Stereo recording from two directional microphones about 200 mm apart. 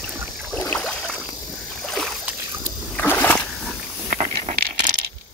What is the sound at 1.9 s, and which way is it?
Rowboat, centre (ahead or behind).